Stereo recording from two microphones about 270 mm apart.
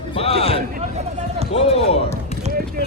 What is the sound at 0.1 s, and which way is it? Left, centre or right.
Speech, left.